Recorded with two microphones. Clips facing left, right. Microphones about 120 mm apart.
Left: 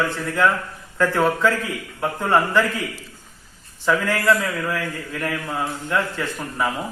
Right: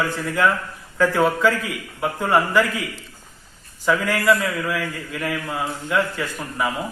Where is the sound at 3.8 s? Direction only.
5° right (ahead or behind).